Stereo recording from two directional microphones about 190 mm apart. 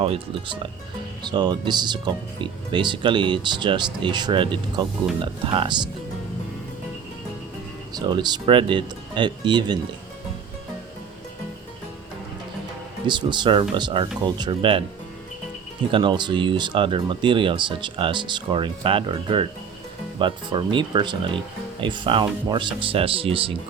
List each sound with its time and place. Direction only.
0.0 s speech: 30° right (ahead or behind)
7.9 s speech: 20° right (ahead or behind)
13.1 s speech: 25° right (ahead or behind)
15.9 s speech: 25° right (ahead or behind)